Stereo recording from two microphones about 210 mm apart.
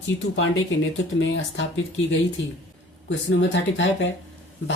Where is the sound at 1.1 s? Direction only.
60° left (ahead or behind).